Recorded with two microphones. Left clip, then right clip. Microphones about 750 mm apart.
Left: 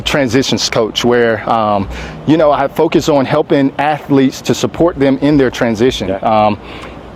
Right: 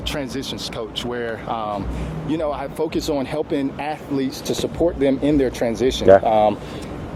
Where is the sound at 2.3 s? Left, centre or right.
Left.